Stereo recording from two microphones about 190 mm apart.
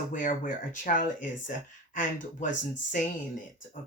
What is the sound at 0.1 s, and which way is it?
Speech, 45° left (ahead or behind).